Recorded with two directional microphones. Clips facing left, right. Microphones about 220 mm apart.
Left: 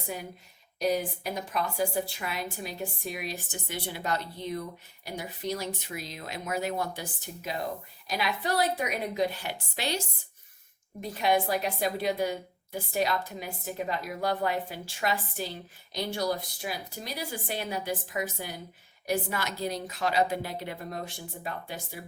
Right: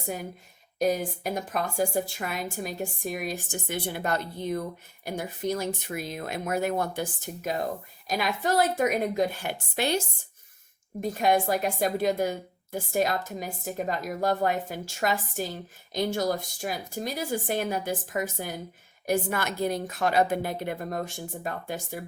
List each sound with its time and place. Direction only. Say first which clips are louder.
0.8 s a woman's voice: right 2 dB; 50° right (ahead or behind)
11.0 s a woman's voice: right 3 dB; 45° right (ahead or behind)